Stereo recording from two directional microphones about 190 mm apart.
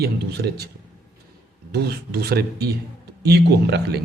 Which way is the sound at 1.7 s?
55° right (ahead or behind).